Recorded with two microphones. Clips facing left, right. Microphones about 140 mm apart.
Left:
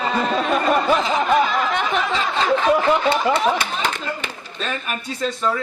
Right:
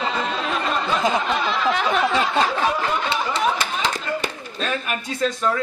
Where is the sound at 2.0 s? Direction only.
50° right (ahead or behind).